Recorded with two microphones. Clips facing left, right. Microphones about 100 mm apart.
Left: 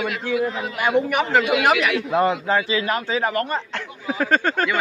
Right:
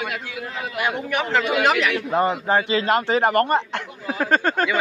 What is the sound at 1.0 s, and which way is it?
A man's voice, 10° left (ahead or behind).